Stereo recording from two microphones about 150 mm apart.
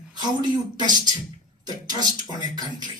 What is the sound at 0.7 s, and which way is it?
Speech, 30° right (ahead or behind).